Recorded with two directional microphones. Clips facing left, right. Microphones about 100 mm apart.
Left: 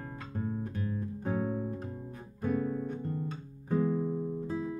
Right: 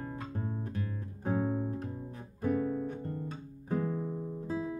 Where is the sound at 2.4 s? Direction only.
10° right (ahead or behind).